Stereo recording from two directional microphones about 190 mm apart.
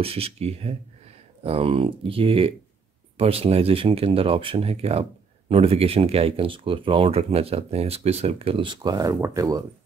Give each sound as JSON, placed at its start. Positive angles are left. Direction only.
{"t": 0.0, "sound": "speech", "side_deg": -30}